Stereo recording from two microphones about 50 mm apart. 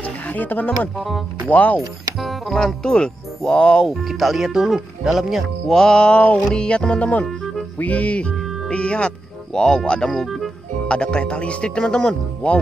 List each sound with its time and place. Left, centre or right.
0.0 s music: left
0.9 s speech: centre
1.5 s speech: left
1.8 s speech: centre
2.5 s speech: centre
3.8 s speech: centre
5.8 s speech: centre
10.2 s speech: centre
10.9 s speech: centre